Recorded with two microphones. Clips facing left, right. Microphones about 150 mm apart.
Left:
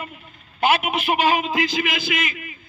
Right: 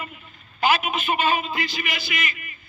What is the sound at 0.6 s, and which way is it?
A man's voice, 60° left (ahead or behind).